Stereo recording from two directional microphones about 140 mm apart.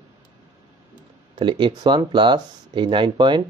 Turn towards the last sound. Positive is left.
turn(degrees=-35)  # may be behind; listen again after turning